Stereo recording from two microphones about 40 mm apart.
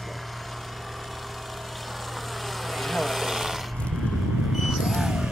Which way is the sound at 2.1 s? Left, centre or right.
Centre.